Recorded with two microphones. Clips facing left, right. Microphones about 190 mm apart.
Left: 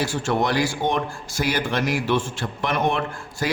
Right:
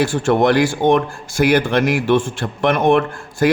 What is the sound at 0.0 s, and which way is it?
A man's voice, 55° right (ahead or behind).